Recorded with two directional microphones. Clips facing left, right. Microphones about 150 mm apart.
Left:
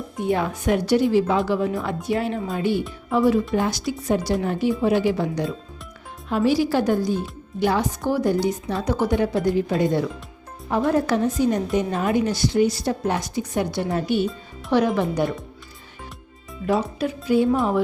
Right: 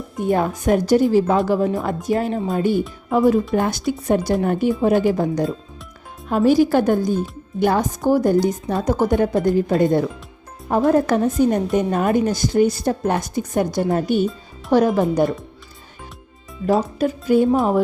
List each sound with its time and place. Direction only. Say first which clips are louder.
0.3 s speech: right 4 dB; 45° right (ahead or behind)
17.0 s speech: right 3 dB; 45° right (ahead or behind)